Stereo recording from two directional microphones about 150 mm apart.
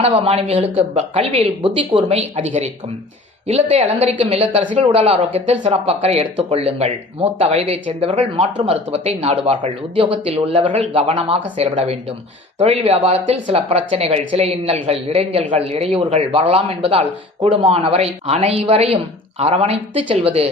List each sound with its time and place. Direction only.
0.0 s speech: 40° right (ahead or behind)
2.0 s speech: 45° right (ahead or behind)